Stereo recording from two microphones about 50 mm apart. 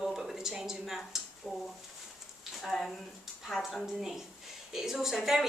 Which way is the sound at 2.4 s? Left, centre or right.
Centre.